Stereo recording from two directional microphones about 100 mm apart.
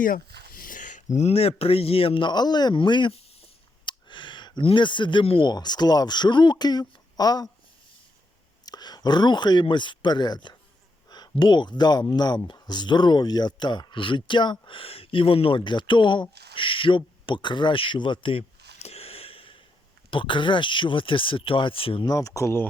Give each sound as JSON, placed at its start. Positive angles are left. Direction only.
{"t": 1.3, "sound": "speech", "side_deg": 85}
{"t": 3.8, "sound": "a sound", "side_deg": 50}
{"t": 5.4, "sound": "speech", "side_deg": 45}
{"t": 8.6, "sound": "speech", "side_deg": 40}
{"t": 11.1, "sound": "a sound", "side_deg": 45}
{"t": 11.8, "sound": "speech", "side_deg": 45}
{"t": 14.8, "sound": "speech", "side_deg": 70}
{"t": 16.6, "sound": "a sound", "side_deg": 60}
{"t": 20.1, "sound": "speech", "side_deg": 60}
{"t": 22.0, "sound": "speech", "side_deg": 35}